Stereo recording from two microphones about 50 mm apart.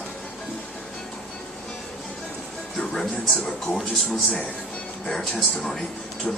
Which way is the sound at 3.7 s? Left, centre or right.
Centre.